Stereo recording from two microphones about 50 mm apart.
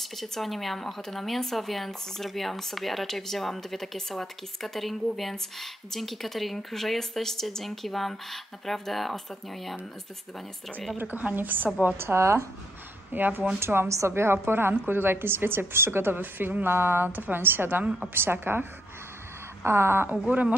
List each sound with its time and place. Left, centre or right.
0.0 s a woman's voice: centre
11.0 s a woman's voice: right
12.0 s speech: right
13.1 s a woman's voice: right
13.6 s speech: right
13.8 s a woman's voice: right
20.1 s speech: right